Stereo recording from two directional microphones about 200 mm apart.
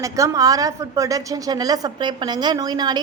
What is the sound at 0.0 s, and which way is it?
A woman's voice, 15° right (ahead or behind).